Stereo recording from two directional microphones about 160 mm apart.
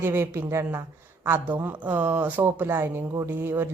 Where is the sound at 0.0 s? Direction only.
15° right (ahead or behind).